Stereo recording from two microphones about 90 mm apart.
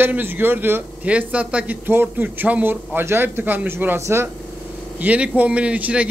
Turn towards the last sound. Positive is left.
turn(degrees=-15)  # may be behind; listen again after turning